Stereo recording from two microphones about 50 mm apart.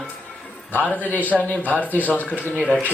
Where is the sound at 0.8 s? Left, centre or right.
Left.